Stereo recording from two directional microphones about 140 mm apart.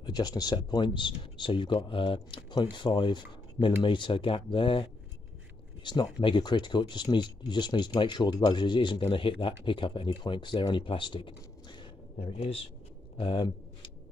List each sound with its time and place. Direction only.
0.0 s speech: 30° left (ahead or behind)
5.9 s speech: 35° left (ahead or behind)